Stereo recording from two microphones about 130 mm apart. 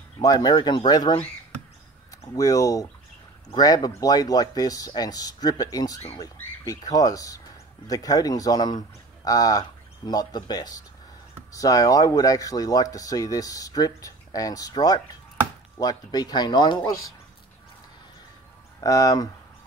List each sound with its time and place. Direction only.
0.2 s speech: 30° left (ahead or behind)
2.3 s speech: 25° left (ahead or behind)
18.8 s speech: 25° left (ahead or behind)